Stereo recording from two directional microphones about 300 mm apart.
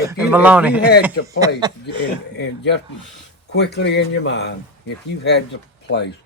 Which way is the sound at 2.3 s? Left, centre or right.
Left.